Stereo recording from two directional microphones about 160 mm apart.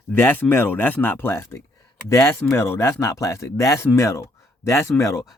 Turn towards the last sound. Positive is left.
turn(degrees=20)  # may be behind; listen again after turning